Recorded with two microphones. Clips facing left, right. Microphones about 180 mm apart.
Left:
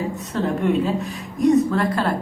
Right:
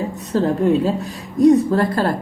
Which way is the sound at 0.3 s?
35° right (ahead or behind).